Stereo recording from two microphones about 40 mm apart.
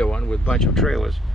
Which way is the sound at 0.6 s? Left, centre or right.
Centre.